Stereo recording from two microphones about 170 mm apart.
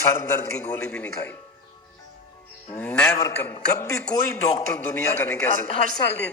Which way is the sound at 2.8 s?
5° left (ahead or behind).